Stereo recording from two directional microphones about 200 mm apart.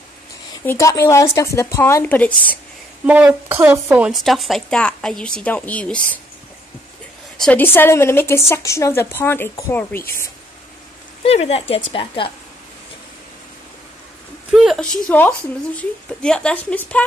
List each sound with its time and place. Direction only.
0.7 s a woman's voice: 15° left (ahead or behind)
3.1 s speech: 10° right (ahead or behind)
7.3 s a woman's voice: 5° left (ahead or behind)
11.2 s speech: 30° left (ahead or behind)
14.5 s speech: centre (ahead or behind)